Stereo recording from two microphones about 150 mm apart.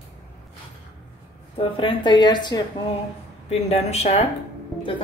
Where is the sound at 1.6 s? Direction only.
35° left (ahead or behind).